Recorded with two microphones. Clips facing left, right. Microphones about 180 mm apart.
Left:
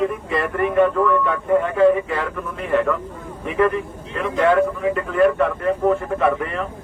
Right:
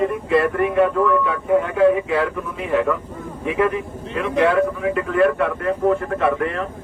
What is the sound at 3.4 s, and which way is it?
Speech, 5° right (ahead or behind).